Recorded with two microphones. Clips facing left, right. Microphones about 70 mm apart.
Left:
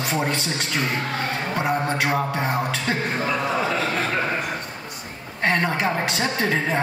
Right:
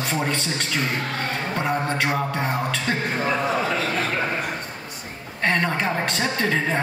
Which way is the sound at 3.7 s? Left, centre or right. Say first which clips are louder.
Left 1 dB; left.